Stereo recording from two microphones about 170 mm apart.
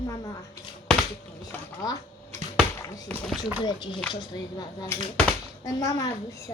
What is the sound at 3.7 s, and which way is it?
A child's voice, 30° left (ahead or behind).